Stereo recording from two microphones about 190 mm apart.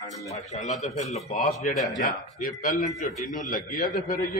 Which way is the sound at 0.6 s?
40° left (ahead or behind).